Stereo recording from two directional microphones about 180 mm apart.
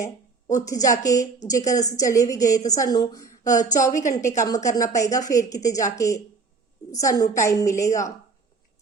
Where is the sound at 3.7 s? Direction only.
45° left (ahead or behind).